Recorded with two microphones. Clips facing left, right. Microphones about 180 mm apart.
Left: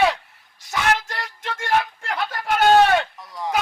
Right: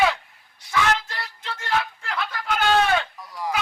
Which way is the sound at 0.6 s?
45° left (ahead or behind).